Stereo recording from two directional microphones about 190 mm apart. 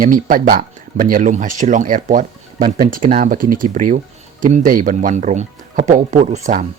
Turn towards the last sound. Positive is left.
turn(degrees=-40)  # may be behind; listen again after turning